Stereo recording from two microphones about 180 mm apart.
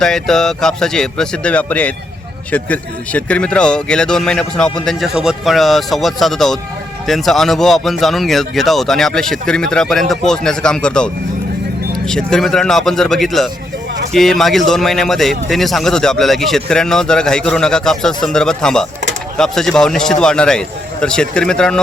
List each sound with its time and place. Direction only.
0.0 s a man's voice: 5° left (ahead or behind)